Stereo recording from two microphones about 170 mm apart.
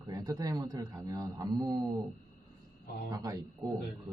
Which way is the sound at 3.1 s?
20° right (ahead or behind).